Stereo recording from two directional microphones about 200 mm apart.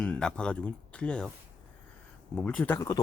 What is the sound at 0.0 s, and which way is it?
Speech, 5° left (ahead or behind).